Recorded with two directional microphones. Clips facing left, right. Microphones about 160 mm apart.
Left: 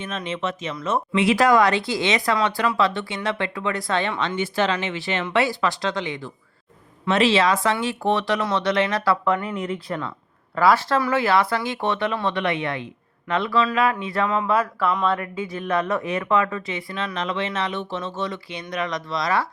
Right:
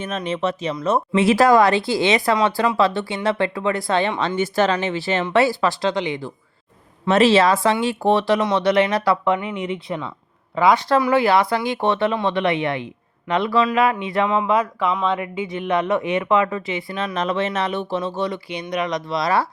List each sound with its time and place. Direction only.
0.0 s speech: 40° right (ahead or behind)
4.4 s speech: 40° right (ahead or behind)
7.0 s speech: 40° right (ahead or behind); by 9.6 s 20° right (ahead or behind)
9.7 s speech: centre (ahead or behind)
10.5 s speech: 15° right (ahead or behind)
11.1 s speech: 30° right (ahead or behind)
14.8 s speech: centre (ahead or behind)
15.1 s speech: 20° right (ahead or behind)
17.2 s speech: 40° right (ahead or behind)
19.1 s speech: 30° right (ahead or behind)